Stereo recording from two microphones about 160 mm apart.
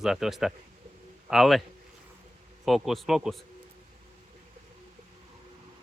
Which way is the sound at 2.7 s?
Centre (ahead or behind).